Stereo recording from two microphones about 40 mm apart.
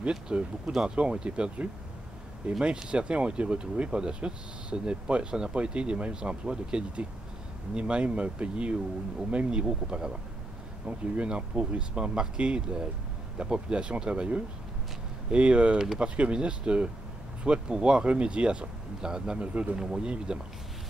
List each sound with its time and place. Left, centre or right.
0.3 s speech: right
10.9 s speech: right